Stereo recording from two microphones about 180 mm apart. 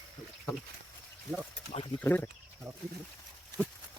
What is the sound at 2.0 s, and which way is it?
Speech, 10° left (ahead or behind).